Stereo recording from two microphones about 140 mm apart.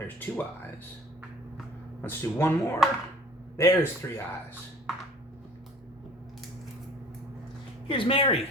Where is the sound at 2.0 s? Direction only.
20° left (ahead or behind).